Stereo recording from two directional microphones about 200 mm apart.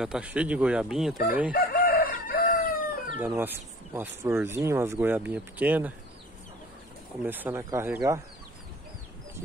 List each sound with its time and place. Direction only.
0.0 s speech: 5° right (ahead or behind)
1.5 s chicken: 45° left (ahead or behind)
3.2 s speech: 10° right (ahead or behind)
7.2 s speech: 10° right (ahead or behind)